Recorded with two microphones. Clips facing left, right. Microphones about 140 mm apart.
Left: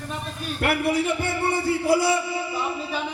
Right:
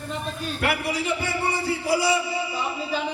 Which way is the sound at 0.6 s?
50° left (ahead or behind).